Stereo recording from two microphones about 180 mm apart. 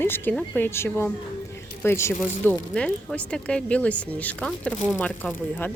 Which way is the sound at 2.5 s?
5° left (ahead or behind).